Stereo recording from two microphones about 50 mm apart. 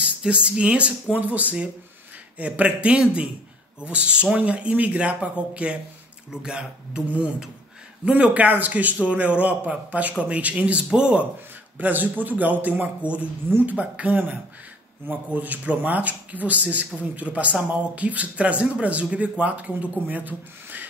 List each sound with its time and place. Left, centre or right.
0.2 s speech: right
11.8 s speech: right